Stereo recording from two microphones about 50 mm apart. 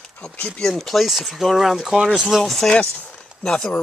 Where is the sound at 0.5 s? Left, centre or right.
Centre.